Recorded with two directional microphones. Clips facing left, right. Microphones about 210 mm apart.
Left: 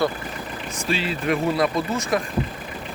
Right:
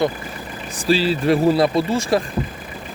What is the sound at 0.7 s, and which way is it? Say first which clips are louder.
Speech: right 8 dB; 35° right (ahead or behind).